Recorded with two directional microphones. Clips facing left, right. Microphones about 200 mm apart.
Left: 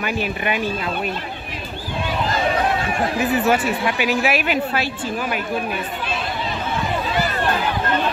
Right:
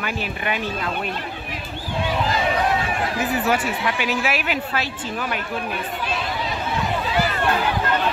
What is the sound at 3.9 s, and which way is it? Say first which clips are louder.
A woman's voice: left 4 dB; 15° left (ahead or behind).